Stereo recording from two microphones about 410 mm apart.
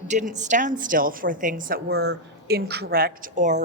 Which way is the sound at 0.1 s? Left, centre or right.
Centre.